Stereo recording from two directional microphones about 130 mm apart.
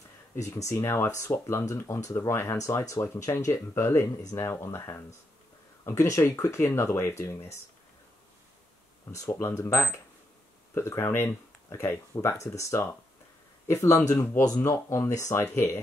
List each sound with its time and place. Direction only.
0.6 s speech: 20° left (ahead or behind)
9.1 s speech: 25° left (ahead or behind)